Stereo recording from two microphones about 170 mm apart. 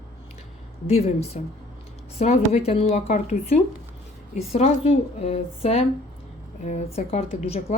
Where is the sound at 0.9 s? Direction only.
40° left (ahead or behind).